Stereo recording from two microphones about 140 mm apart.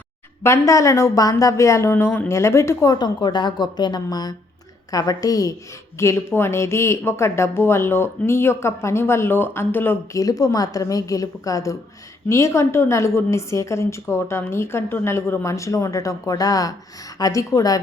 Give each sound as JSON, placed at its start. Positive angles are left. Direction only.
{"t": 0.4, "sound": "speech", "side_deg": 20}